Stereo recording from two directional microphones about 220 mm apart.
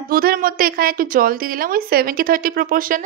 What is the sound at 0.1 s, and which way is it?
Speech, 40° right (ahead or behind).